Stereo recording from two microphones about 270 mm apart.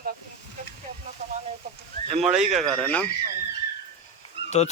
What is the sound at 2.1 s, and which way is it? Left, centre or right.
Speech, centre.